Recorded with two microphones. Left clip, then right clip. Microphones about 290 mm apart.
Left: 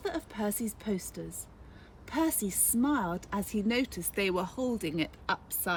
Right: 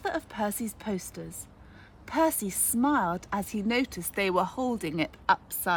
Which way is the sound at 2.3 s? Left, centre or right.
Centre.